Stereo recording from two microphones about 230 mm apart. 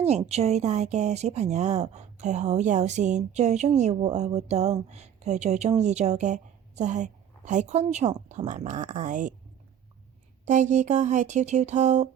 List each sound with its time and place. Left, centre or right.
0.0 s a woman's voice: right
10.4 s speech: right